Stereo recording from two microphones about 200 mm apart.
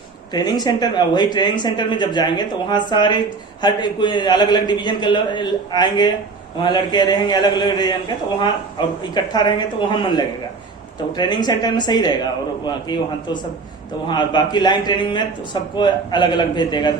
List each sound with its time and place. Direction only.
0.3 s speech: 20° left (ahead or behind)